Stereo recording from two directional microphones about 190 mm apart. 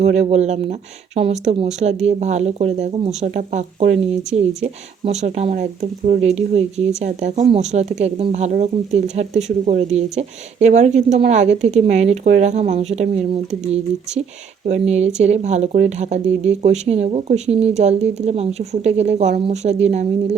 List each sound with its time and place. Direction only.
0.0 s speech: 35° right (ahead or behind)